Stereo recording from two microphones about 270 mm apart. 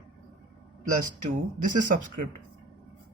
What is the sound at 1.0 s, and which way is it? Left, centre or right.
Speech, right.